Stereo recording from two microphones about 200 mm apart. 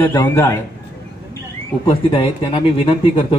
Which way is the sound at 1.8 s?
25° left (ahead or behind).